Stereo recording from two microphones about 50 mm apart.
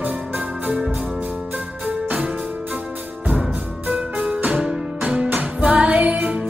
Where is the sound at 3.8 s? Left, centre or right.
Right.